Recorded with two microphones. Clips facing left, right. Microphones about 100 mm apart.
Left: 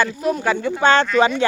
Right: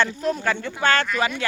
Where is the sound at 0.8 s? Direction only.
25° left (ahead or behind).